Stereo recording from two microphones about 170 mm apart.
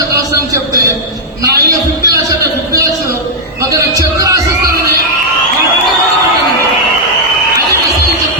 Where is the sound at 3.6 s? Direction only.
20° right (ahead or behind).